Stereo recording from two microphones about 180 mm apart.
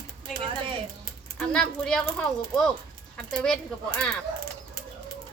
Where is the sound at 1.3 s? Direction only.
5° left (ahead or behind).